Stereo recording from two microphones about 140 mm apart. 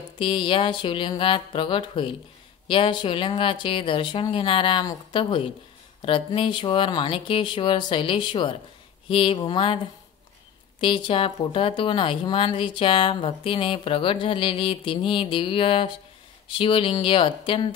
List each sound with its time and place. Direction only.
0.2 s a woman's voice: 35° left (ahead or behind)
10.8 s a woman's voice: 35° left (ahead or behind)